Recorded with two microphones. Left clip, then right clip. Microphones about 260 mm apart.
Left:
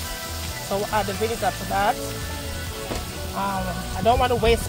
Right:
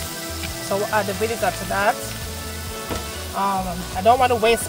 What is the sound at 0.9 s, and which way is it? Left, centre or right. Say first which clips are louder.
Speech: right 1 dB; right.